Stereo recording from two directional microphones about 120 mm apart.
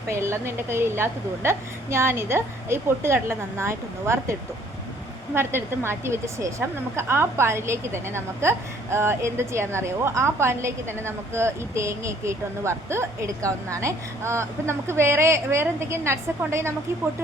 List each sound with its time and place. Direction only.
0.1 s a woman's voice: 20° right (ahead or behind)